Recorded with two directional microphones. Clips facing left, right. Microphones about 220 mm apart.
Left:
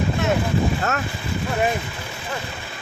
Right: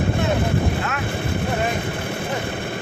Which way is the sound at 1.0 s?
55° right (ahead or behind).